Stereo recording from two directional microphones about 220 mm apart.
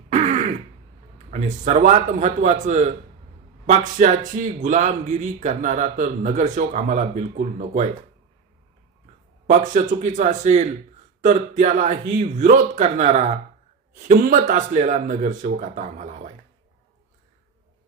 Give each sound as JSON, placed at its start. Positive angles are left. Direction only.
{"t": 0.1, "sound": "throat clearing", "side_deg": -35}
{"t": 1.3, "sound": "a man's voice", "side_deg": -30}
{"t": 9.5, "sound": "a man's voice", "side_deg": -35}